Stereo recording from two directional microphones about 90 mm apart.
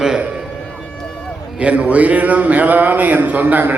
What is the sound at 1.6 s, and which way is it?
A man's voice, 15° right (ahead or behind).